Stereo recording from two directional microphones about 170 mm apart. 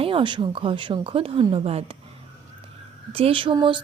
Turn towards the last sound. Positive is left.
turn(degrees=-30)  # may be behind; listen again after turning